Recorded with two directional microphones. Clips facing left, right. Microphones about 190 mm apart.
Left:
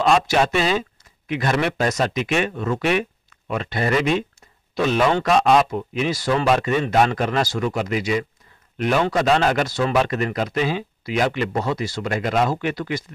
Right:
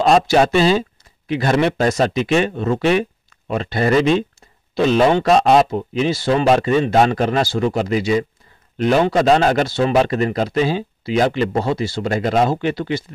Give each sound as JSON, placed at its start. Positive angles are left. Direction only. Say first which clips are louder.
{"t": 0.0, "sound": "speech", "louder": "right 4 dB", "side_deg": -35}